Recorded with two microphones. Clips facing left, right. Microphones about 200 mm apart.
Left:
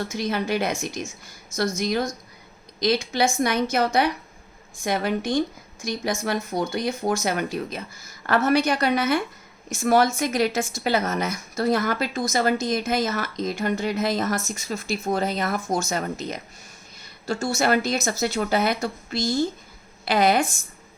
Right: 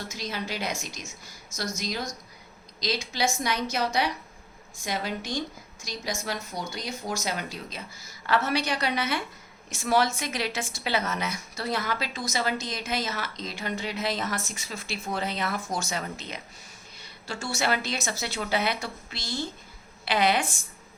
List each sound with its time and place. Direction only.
0.1 s a woman's voice: 55° left (ahead or behind)